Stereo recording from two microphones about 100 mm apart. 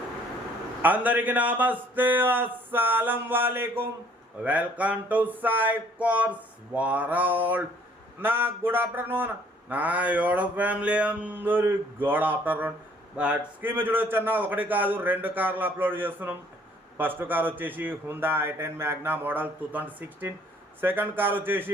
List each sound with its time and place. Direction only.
0.8 s a man's voice: 15° right (ahead or behind)